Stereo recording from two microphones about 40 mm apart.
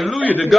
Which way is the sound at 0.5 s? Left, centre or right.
Centre.